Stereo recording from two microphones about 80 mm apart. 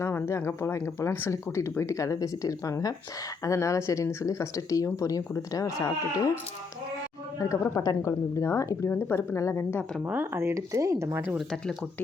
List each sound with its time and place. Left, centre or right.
0.0 s speech: left
7.3 s speech: left
10.0 s speech: right
11.1 s speech: right
11.3 s speech: centre